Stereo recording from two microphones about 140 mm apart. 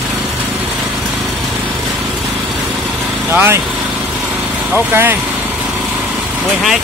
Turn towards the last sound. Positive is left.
turn(degrees=-15)  # may be behind; listen again after turning